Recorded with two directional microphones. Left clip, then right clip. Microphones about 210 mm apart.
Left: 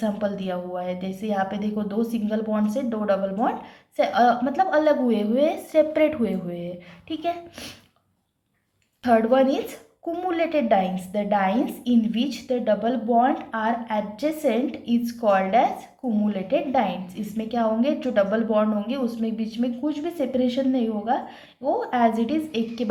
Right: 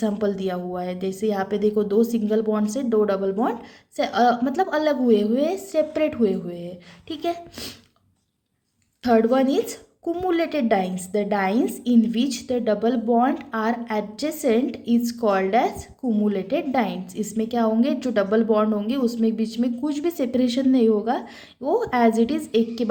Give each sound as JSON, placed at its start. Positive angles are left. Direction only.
{"t": 0.0, "sound": "a woman's voice", "side_deg": -40}
{"t": 9.0, "sound": "a woman's voice", "side_deg": -35}